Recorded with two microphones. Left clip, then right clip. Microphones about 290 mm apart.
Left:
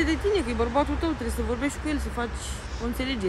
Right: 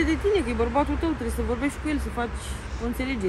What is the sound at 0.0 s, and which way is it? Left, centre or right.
Speech, centre.